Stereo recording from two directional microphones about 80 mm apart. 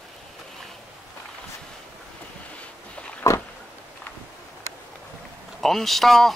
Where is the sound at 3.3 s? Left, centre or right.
Left.